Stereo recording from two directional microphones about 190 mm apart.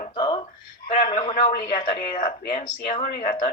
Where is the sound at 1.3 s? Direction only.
45° left (ahead or behind).